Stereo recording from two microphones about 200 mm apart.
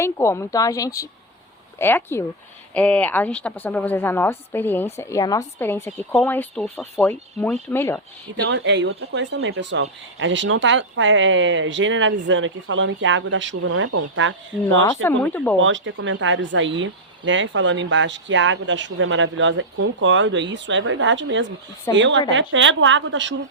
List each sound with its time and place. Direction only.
0.0 s a woman's voice: 15° left (ahead or behind)
8.4 s speech: 60° right (ahead or behind)
15.0 s a woman's voice: 10° left (ahead or behind)
15.6 s a woman's voice: 70° right (ahead or behind)